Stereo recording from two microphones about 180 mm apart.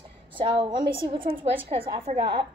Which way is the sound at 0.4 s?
25° right (ahead or behind).